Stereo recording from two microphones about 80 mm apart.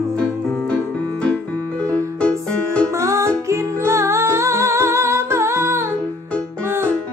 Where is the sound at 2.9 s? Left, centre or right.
Right.